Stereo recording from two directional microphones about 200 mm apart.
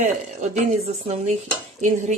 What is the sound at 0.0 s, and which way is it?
A woman's voice, 35° right (ahead or behind).